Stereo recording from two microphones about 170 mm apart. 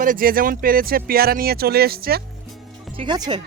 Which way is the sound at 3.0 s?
25° right (ahead or behind).